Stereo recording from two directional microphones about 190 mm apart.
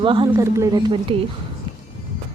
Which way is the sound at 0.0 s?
25° right (ahead or behind).